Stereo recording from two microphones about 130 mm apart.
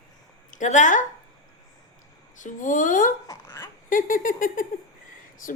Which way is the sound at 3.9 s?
90° left.